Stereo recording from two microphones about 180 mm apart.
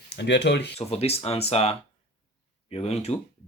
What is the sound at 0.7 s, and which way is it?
Speech, 35° left (ahead or behind).